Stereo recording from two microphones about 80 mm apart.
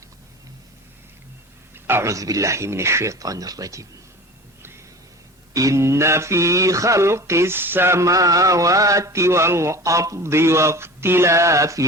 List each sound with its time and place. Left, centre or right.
1.7 s mantra: right
5.5 s mantra: right